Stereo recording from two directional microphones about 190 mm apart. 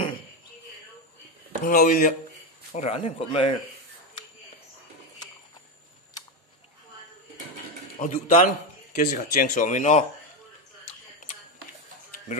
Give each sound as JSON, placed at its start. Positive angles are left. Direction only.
{"t": 1.6, "sound": "speech", "side_deg": 45}
{"t": 8.0, "sound": "speech", "side_deg": 40}